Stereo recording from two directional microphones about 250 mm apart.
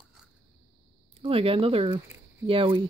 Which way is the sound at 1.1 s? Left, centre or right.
Right.